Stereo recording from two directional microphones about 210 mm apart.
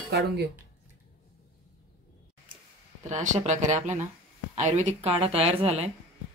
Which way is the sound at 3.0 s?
35° right (ahead or behind).